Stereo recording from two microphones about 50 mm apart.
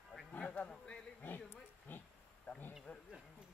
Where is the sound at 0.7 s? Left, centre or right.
Centre.